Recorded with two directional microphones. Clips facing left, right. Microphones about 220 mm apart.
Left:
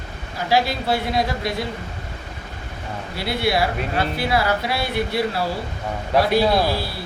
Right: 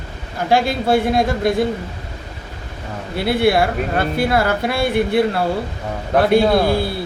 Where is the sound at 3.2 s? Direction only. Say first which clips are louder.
Right 6 dB; 55° right (ahead or behind).